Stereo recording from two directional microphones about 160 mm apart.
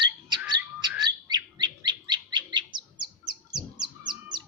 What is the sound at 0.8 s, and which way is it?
Bird, 25° right (ahead or behind).